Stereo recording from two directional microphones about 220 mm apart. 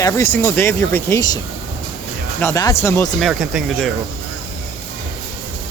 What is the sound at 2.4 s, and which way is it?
Speech, 15° left (ahead or behind).